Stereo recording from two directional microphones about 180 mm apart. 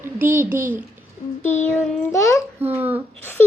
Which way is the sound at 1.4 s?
40° left (ahead or behind).